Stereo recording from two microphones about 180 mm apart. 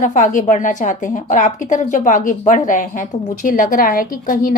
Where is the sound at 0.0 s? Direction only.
45° left (ahead or behind).